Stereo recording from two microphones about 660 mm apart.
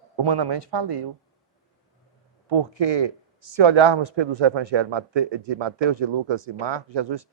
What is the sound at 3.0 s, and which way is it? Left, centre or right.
Speech, right.